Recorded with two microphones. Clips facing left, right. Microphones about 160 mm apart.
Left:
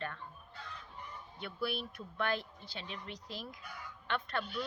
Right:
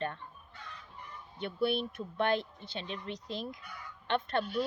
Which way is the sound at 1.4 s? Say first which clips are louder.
Right 7 dB; 25° right (ahead or behind).